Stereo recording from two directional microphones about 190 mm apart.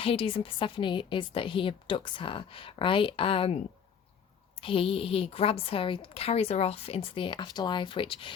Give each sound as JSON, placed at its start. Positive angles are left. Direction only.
{"t": 0.0, "sound": "a woman's voice", "side_deg": 30}
{"t": 4.6, "sound": "a woman's voice", "side_deg": 30}